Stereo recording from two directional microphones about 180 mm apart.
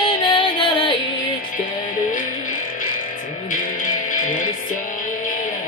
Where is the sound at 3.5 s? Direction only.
50° left (ahead or behind).